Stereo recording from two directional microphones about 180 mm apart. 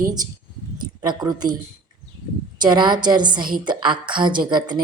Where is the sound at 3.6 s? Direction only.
25° right (ahead or behind).